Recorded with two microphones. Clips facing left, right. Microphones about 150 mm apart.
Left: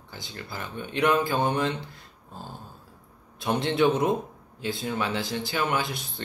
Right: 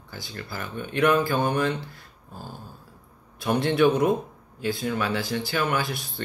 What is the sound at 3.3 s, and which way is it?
Speech, 20° left (ahead or behind).